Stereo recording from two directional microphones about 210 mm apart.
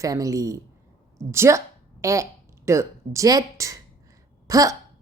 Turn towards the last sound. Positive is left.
turn(degrees=-15)  # may be behind; listen again after turning